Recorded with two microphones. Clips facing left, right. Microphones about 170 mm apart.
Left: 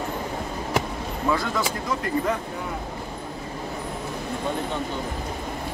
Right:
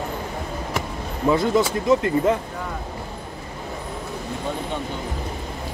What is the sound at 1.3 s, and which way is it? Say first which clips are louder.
Speech: right 8 dB; 25° right (ahead or behind).